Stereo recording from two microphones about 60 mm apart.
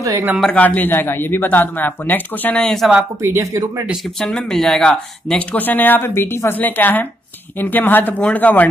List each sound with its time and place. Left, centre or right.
0.5 s a man's voice: left
2.6 s speech: centre
3.2 s speech: right
4.2 s speech: centre
5.5 s a man's voice: left
6.6 s a man's voice: left